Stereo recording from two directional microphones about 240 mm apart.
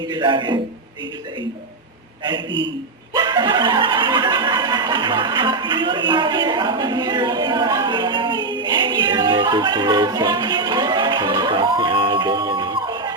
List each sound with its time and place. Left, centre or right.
0.1 s a man's voice: centre
3.2 s snicker: centre